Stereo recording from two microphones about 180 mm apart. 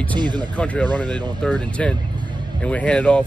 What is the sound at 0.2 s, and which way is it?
Speech, 25° right (ahead or behind).